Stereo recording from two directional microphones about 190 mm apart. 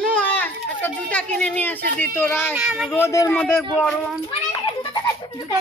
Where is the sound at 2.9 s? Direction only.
15° left (ahead or behind).